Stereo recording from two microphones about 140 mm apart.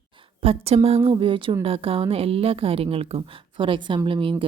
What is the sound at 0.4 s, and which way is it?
A woman's voice, 45° right (ahead or behind).